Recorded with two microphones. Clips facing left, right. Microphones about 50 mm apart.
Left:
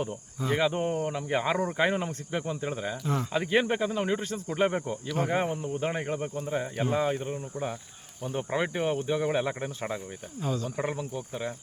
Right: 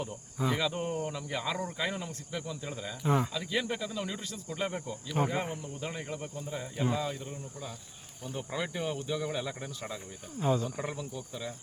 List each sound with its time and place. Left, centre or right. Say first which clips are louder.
0.5 s speech: left 9 dB; left
3.0 s speech: right 5 dB; centre
3.3 s speech: left 8 dB; left
5.2 s speech: even; centre
5.6 s speech: left 8 dB; left
10.4 s speech: right 2 dB; centre
10.8 s speech: left 5 dB; left